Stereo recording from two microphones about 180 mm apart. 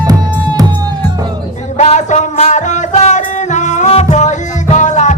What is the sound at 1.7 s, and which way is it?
Music, 40° left (ahead or behind).